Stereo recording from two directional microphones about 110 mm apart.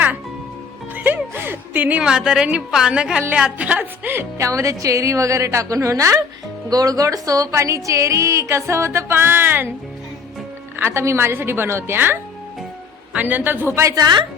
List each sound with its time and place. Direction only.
0.9 s a woman's voice: 15° right (ahead or behind)
10.8 s a woman's voice: 25° right (ahead or behind); by 14.3 s 40° right (ahead or behind)